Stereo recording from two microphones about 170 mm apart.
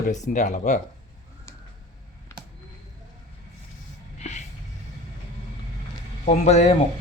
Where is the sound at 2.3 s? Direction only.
15° left (ahead or behind).